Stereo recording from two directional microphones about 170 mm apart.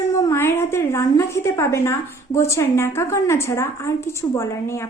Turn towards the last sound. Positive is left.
turn(degrees=15)  # may be behind; listen again after turning